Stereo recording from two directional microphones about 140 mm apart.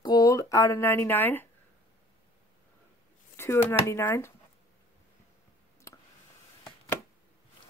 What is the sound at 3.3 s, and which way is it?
Speech, 15° left (ahead or behind).